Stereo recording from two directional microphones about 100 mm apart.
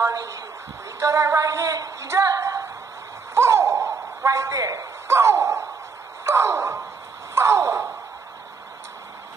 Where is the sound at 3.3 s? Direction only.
25° right (ahead or behind).